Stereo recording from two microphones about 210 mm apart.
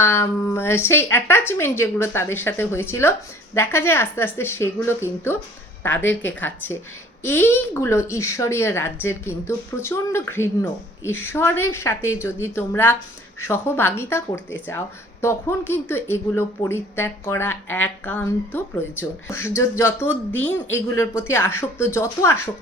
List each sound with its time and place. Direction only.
0.0 s speech: 10° left (ahead or behind)